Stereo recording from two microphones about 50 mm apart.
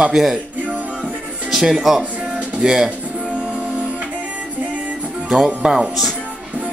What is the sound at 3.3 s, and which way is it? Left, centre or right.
Music, right.